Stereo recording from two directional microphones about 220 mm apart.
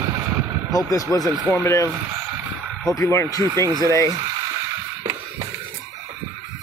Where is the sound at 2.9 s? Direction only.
10° left (ahead or behind).